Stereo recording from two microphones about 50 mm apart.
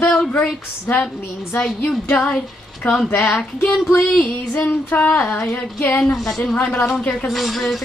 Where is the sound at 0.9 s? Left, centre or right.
Left.